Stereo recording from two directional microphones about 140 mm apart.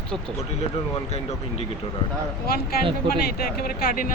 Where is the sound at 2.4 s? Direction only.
90° left.